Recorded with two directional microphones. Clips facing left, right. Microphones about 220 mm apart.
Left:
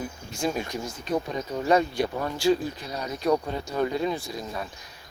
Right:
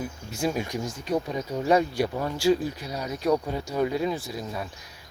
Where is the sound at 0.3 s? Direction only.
10° right (ahead or behind).